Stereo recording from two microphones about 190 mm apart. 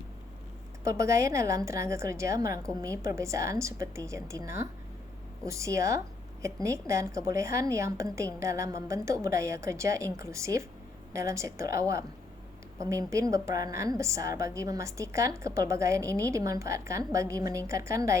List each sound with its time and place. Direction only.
0.9 s a woman's voice: 15° right (ahead or behind)